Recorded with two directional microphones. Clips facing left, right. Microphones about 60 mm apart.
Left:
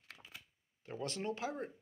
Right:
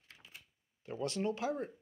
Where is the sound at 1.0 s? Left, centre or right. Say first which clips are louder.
Right 4 dB; left.